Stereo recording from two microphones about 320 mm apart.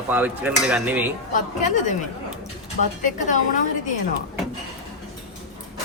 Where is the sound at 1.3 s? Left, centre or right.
Left.